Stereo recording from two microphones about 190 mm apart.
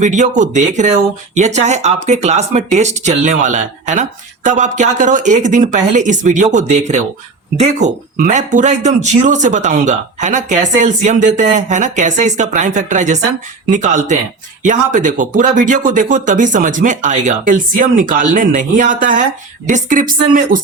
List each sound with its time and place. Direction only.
0.0 s speech: 40° right (ahead or behind)